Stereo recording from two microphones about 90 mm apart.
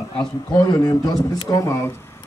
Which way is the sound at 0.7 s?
45° left (ahead or behind).